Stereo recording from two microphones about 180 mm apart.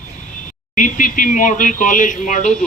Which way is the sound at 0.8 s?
45° left (ahead or behind).